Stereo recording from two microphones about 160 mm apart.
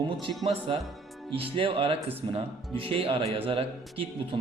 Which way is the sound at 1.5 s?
35° right (ahead or behind).